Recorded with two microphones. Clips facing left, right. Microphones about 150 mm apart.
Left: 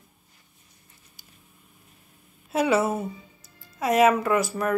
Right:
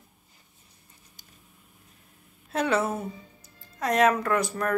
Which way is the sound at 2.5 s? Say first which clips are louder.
Left 3 dB; 5° left (ahead or behind).